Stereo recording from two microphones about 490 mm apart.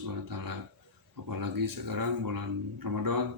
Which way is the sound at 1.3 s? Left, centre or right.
Right.